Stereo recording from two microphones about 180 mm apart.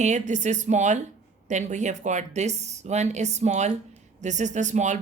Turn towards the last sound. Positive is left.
turn(degrees=-40)  # may be behind; listen again after turning